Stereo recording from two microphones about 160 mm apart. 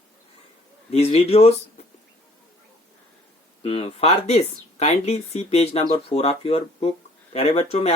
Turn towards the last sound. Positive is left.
turn(degrees=35)  # may be behind; listen again after turning